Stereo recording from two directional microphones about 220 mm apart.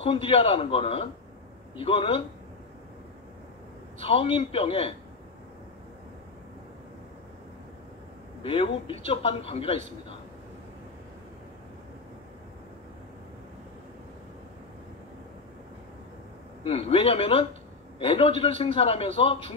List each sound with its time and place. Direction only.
0.0 s a man's voice: 25° left (ahead or behind)
4.0 s a man's voice: 25° left (ahead or behind)
8.4 s a man's voice: 25° left (ahead or behind)
16.6 s a man's voice: 25° left (ahead or behind)